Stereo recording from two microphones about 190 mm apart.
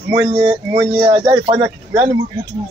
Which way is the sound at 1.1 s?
25° right (ahead or behind).